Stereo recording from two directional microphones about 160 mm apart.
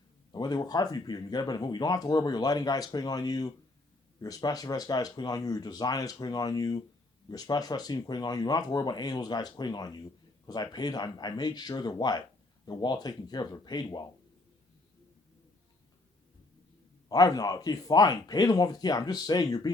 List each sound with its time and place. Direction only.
0.3 s speech: 25° left (ahead or behind)
17.1 s speech: 25° left (ahead or behind)